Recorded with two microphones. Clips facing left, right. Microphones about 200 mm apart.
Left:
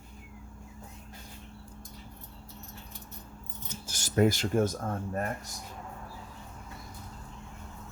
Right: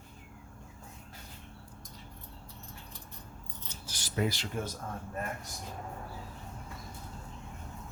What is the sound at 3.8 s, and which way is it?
Speech, 45° left (ahead or behind).